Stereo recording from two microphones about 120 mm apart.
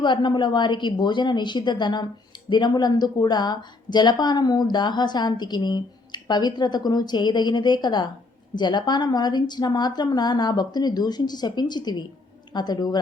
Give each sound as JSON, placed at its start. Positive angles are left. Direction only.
{"t": 0.0, "sound": "a woman's voice", "side_deg": 40}